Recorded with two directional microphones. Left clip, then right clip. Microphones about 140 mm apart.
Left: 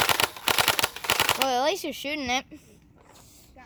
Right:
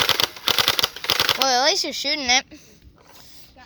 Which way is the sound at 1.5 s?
10° left (ahead or behind).